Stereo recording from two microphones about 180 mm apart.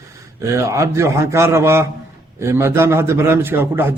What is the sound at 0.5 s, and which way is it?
A man's voice, 15° right (ahead or behind).